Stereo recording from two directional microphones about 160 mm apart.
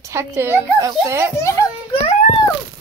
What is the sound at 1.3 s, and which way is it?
Speech, 20° left (ahead or behind).